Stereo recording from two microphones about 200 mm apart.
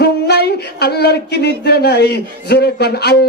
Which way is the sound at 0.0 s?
55° left (ahead or behind).